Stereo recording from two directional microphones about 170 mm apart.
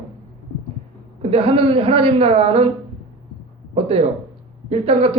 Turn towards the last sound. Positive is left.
turn(degrees=-35)  # may be behind; listen again after turning